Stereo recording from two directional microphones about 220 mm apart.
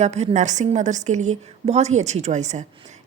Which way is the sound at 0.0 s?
30° right (ahead or behind).